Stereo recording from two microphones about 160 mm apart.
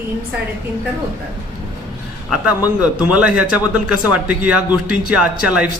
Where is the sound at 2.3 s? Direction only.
5° right (ahead or behind).